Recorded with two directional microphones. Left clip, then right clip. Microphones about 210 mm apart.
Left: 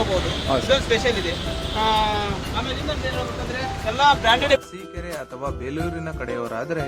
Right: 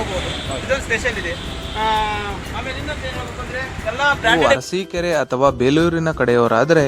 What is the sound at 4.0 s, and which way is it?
Speech, 15° right (ahead or behind).